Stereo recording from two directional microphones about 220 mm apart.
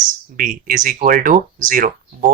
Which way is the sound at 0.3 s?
40° right (ahead or behind).